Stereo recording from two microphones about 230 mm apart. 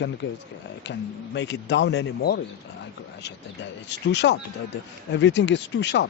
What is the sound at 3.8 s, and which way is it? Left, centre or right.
Speech, left.